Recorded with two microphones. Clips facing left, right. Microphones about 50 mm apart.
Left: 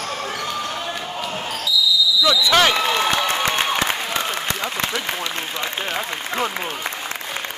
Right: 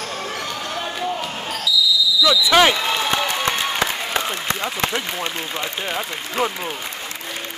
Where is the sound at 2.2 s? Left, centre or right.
Centre.